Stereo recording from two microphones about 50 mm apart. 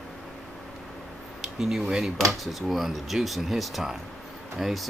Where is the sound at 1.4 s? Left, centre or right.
Centre.